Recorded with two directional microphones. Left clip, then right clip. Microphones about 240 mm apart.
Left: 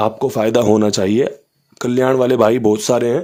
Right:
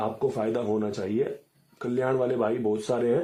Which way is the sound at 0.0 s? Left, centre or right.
Left.